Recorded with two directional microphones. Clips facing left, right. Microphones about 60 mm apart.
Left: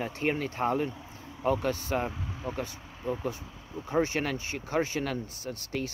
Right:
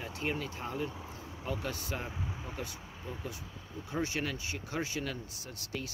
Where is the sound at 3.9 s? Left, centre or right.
Left.